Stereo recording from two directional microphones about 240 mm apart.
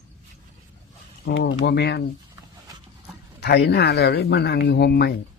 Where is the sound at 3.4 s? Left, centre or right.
Left.